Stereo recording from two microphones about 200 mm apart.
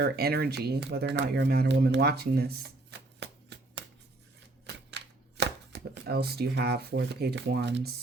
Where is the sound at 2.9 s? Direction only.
60° right (ahead or behind).